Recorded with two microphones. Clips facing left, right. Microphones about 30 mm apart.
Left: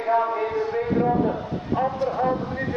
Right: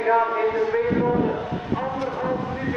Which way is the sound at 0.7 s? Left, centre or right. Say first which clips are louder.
Right 4 dB; right.